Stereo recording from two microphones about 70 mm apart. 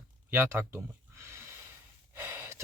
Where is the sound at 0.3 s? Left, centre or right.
Right.